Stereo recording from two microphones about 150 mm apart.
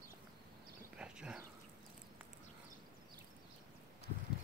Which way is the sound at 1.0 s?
5° right (ahead or behind).